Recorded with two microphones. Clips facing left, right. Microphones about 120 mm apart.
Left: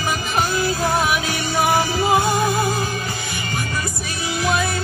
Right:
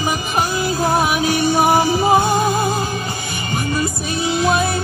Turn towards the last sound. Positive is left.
turn(degrees=-20)  # may be behind; listen again after turning